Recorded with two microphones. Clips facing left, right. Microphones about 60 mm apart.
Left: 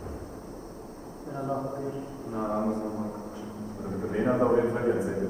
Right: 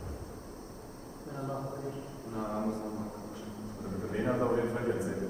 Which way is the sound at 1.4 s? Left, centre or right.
Centre.